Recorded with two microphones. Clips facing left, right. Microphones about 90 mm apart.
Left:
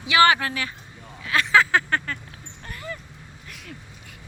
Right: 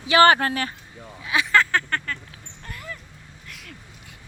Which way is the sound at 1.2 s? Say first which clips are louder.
Even; 15° right (ahead or behind).